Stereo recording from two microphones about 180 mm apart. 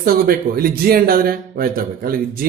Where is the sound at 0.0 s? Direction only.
55° right (ahead or behind).